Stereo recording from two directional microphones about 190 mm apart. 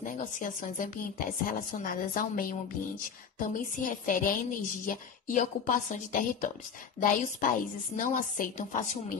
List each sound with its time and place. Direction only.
0.0 s a woman's voice: 45° left (ahead or behind)